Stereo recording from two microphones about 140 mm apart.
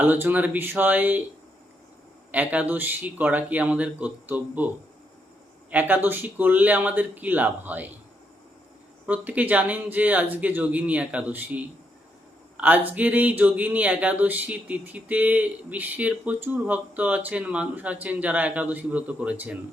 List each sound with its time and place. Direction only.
0.0 s speech: 15° right (ahead or behind)
2.3 s speech: 10° right (ahead or behind)
5.7 s speech: 15° right (ahead or behind)
9.0 s speech: 10° right (ahead or behind)